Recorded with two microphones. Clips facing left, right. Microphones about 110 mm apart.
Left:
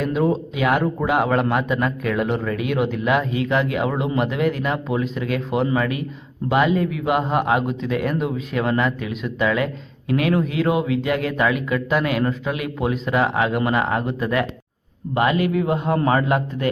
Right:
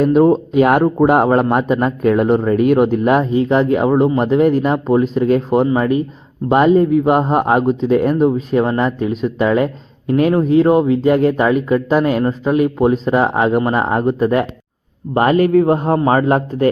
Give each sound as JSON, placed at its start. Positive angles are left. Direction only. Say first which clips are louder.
{"t": 0.0, "sound": "speech", "louder": "right 9 dB", "side_deg": -45}